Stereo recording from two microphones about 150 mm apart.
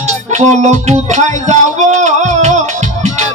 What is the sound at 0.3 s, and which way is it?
Music, 50° right (ahead or behind).